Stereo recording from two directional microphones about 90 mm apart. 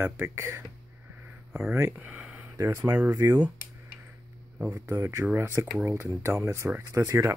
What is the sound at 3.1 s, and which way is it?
Speech, 45° right (ahead or behind).